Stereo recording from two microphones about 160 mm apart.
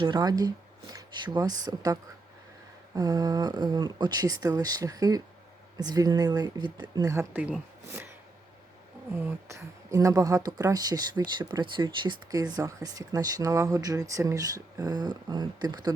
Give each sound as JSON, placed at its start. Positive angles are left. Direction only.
{"t": 0.0, "sound": "speech", "side_deg": -25}
{"t": 7.3, "sound": "speech", "side_deg": -10}
{"t": 9.2, "sound": "speech", "side_deg": -20}